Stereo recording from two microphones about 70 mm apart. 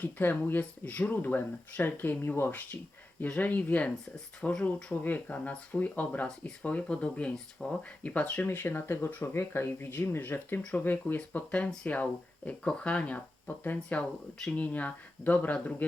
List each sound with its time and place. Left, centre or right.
0.0 s speech: left
4.4 s speech: centre
4.6 s speech: left
10.6 s speech: centre
10.8 s speech: left